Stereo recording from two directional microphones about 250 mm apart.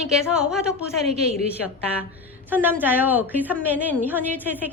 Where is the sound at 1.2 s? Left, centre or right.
Right.